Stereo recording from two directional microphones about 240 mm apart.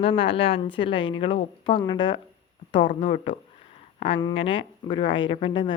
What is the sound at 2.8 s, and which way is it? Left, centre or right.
A woman's voice, left.